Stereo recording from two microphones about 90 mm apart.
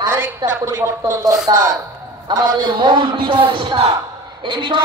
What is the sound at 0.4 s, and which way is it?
A woman's voice, 35° right (ahead or behind).